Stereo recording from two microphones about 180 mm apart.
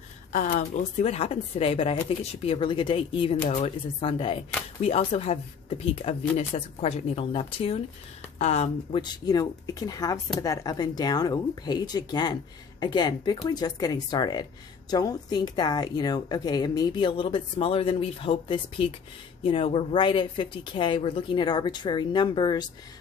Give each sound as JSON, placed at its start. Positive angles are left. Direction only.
{"t": 0.3, "sound": "speech", "side_deg": 45}
{"t": 8.9, "sound": "speech", "side_deg": 25}